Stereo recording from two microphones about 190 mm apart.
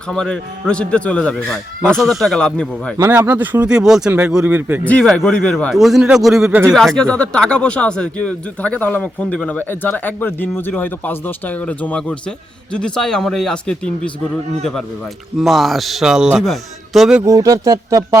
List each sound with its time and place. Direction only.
0.1 s speech: 5° left (ahead or behind)
3.0 s speech: 10° right (ahead or behind)
4.9 s speech: 5° left (ahead or behind)
17.2 s speech: 20° right (ahead or behind)